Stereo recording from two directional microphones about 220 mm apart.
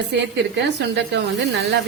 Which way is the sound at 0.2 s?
50° right (ahead or behind).